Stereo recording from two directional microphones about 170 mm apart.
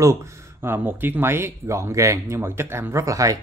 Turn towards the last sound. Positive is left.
turn(degrees=-20)  # may be behind; listen again after turning